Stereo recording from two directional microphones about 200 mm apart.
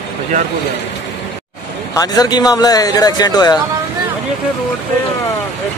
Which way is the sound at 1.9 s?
20° left (ahead or behind).